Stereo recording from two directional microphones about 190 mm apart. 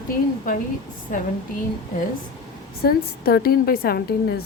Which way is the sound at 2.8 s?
55° left (ahead or behind).